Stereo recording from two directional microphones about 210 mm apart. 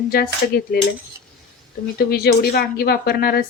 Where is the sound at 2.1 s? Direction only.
45° left (ahead or behind).